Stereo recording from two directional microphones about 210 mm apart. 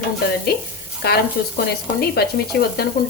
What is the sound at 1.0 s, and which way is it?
A woman's voice, 50° left (ahead or behind).